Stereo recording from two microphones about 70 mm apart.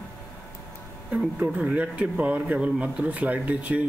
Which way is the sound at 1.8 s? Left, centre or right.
Right.